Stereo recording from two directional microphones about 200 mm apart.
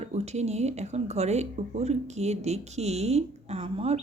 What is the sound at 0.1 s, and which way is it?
Speech, 35° right (ahead or behind).